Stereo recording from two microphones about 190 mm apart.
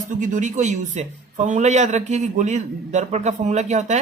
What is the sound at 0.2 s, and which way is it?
Speech, 40° right (ahead or behind).